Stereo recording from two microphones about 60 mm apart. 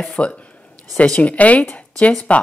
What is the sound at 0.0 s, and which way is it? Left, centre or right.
Speech, centre.